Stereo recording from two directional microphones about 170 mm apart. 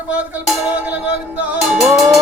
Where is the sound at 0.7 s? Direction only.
10° right (ahead or behind).